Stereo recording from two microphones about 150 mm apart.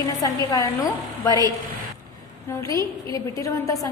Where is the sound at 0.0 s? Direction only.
25° left (ahead or behind).